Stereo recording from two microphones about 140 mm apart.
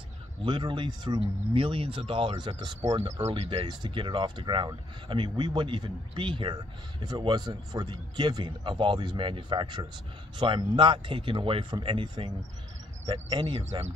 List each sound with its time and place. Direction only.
0.4 s speech: 35° right (ahead or behind)
3.0 s speech: 50° right (ahead or behind)
3.6 s speech: 35° right (ahead or behind)
13.4 s speech: 45° right (ahead or behind)